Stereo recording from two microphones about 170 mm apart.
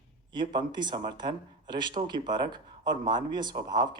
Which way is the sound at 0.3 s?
25° right (ahead or behind).